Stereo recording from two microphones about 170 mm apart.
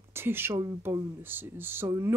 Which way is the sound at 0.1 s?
15° right (ahead or behind).